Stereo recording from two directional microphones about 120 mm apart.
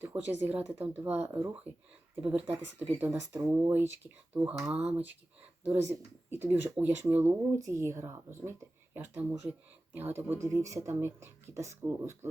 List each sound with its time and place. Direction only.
0.0 s speech: 20° right (ahead or behind)
5.6 s speech: 25° right (ahead or behind)